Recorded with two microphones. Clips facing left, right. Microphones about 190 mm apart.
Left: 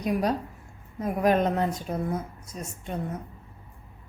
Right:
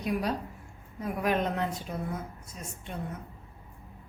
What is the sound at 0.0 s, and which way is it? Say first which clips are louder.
A woman's voice: left 4 dB; 45° left (ahead or behind).